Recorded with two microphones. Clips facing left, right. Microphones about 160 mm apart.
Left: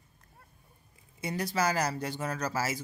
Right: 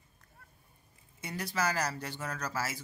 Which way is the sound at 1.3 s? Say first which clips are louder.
Left 6 dB; 35° left (ahead or behind).